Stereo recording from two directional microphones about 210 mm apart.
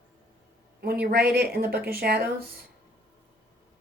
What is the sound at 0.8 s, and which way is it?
Speech, 45° right (ahead or behind).